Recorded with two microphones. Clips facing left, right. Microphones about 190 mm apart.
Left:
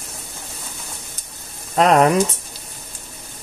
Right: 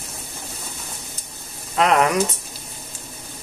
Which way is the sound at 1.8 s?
35° left (ahead or behind).